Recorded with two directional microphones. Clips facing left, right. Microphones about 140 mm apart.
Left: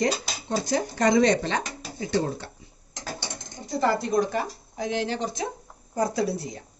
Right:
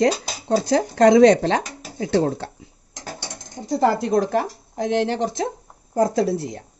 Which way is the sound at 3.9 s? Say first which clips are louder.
Right 5 dB; 90° right.